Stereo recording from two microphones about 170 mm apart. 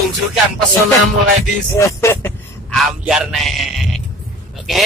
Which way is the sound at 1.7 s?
15° left (ahead or behind).